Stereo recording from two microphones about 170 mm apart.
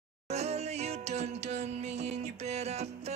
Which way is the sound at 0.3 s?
40° right (ahead or behind).